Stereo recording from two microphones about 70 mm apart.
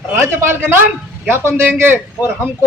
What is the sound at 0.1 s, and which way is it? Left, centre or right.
A man's voice, right.